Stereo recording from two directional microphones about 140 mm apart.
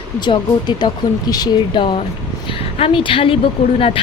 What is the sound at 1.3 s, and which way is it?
Speech, 30° left (ahead or behind).